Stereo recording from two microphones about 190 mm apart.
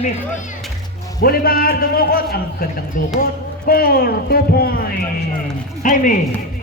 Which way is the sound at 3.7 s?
50° left (ahead or behind).